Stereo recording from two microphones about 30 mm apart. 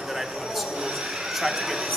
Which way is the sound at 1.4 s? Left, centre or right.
Centre.